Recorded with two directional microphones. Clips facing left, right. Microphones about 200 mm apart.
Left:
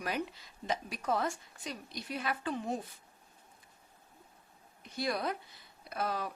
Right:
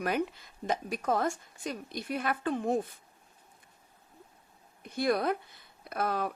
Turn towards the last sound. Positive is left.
turn(degrees=-55)  # may be behind; listen again after turning